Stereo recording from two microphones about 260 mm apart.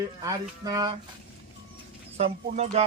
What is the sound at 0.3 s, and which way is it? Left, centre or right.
Speech, centre.